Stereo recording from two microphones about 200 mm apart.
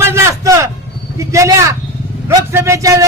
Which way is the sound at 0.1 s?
15° right (ahead or behind).